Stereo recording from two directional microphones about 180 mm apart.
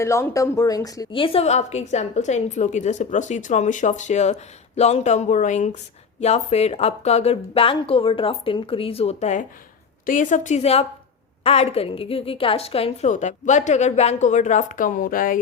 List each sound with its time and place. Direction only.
0.0 s a woman's voice: 15° left (ahead or behind); by 15.4 s 50° left (ahead or behind)